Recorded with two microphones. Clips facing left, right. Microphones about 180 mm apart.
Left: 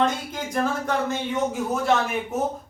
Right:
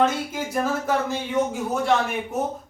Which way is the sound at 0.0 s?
5° right (ahead or behind).